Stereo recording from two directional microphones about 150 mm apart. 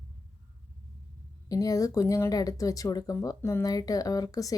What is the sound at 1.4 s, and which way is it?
A woman's voice, 25° left (ahead or behind).